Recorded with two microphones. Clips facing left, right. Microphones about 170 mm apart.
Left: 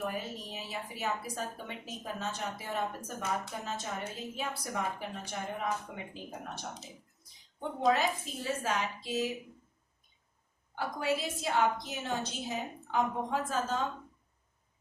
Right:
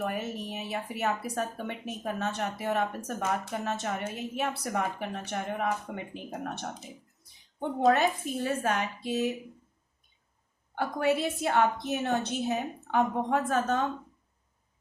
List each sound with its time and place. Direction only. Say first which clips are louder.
0.0 s speech: right 4 dB; 65° right (ahead or behind)
7.9 s speech: right 4 dB; 60° right (ahead or behind)
10.8 s speech: right 6 dB; 60° right (ahead or behind)